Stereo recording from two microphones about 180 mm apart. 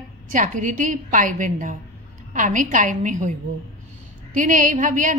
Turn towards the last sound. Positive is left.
turn(degrees=-45)  # may be behind; listen again after turning